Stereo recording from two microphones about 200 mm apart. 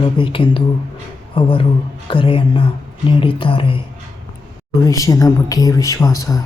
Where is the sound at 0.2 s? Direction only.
25° left (ahead or behind).